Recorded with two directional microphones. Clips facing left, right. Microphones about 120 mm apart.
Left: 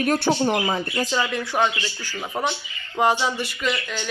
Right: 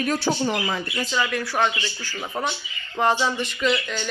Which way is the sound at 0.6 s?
30° left (ahead or behind).